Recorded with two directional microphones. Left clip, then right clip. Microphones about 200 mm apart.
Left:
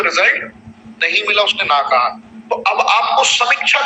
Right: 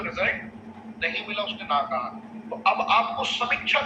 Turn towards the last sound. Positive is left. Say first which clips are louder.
# left 10 dB
turn(degrees=45)  # may be behind; listen again after turning